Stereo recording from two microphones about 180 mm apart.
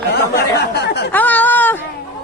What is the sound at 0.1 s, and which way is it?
Chatter, 70° left (ahead or behind).